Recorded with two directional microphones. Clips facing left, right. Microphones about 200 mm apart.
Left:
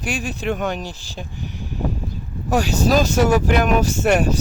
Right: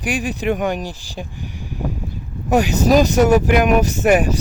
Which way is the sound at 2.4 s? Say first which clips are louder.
Right 3 dB; 15° right (ahead or behind).